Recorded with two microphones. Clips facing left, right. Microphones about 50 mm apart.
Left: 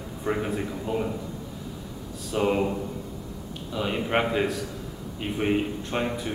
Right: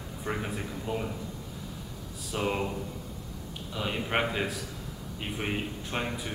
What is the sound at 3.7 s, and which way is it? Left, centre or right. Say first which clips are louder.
A man's voice: left 5 dB; centre.